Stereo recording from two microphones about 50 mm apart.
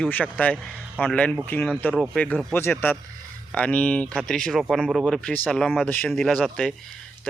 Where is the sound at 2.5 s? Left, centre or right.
Left.